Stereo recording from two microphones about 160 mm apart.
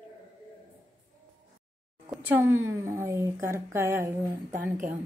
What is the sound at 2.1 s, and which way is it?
Speech, 10° right (ahead or behind).